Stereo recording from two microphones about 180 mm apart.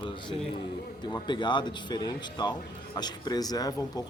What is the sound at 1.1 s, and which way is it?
Speech, 25° left (ahead or behind).